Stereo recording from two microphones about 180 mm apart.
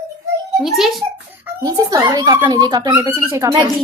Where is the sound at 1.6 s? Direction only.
20° right (ahead or behind).